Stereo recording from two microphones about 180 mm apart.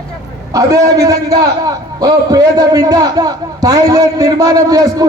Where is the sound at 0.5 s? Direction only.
20° right (ahead or behind).